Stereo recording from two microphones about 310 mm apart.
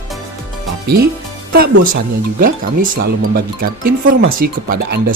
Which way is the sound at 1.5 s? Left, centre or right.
Right.